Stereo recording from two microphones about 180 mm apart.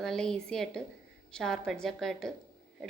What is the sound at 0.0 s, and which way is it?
A woman's voice, 5° left (ahead or behind).